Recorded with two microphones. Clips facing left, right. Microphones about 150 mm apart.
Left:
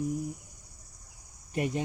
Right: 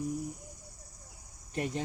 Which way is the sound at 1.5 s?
10° left (ahead or behind).